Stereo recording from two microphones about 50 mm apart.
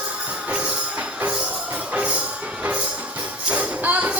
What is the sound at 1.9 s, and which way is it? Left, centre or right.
Music, right.